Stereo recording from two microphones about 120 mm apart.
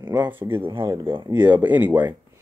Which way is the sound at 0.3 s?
15° right (ahead or behind).